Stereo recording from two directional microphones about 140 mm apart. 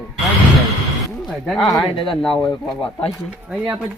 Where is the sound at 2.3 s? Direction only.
35° left (ahead or behind).